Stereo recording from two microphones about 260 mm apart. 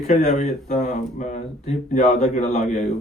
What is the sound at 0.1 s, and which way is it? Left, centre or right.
Speech, left.